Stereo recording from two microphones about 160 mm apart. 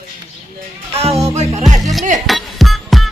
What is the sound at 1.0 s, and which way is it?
Music, 40° right (ahead or behind).